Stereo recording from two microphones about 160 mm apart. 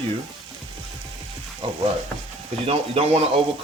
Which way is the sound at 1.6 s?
35° right (ahead or behind).